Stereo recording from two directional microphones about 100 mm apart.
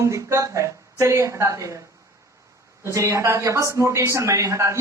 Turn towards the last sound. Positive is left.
turn(degrees=-30)  # may be behind; listen again after turning